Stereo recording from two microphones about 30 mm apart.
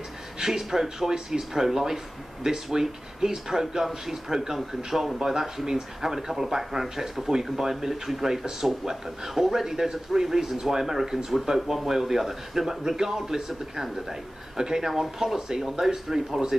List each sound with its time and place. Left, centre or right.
0.4 s speech: centre